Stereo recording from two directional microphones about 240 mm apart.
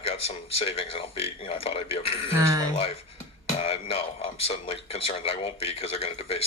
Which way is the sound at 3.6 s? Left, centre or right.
Left.